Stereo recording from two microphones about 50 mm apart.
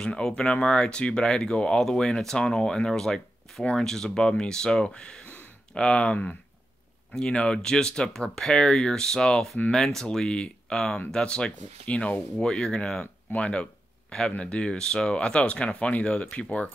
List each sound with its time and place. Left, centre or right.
0.0 s speech: centre
7.2 s speech: centre
11.8 s speech: left
12.4 s speech: centre
13.0 s speech: left